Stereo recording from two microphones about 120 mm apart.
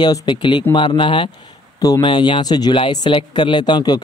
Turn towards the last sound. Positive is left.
turn(degrees=35)  # may be behind; listen again after turning